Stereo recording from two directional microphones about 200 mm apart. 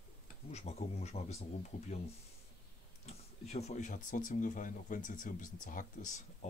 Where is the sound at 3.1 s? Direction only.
35° left (ahead or behind).